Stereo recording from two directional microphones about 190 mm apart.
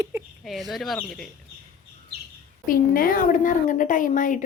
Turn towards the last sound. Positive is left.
turn(degrees=45)  # may be behind; listen again after turning